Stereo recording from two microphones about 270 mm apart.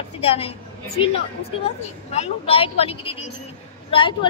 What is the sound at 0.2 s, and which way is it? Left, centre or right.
Speech, left.